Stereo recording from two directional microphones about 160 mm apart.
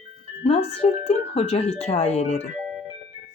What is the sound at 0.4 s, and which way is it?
Speech, 40° left (ahead or behind).